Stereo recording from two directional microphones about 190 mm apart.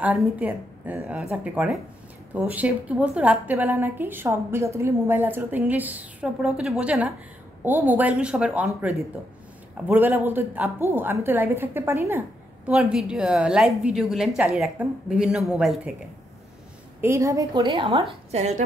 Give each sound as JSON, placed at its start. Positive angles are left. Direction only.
{"t": 0.0, "sound": "a woman's voice", "side_deg": -5}
{"t": 17.0, "sound": "a woman's voice", "side_deg": -15}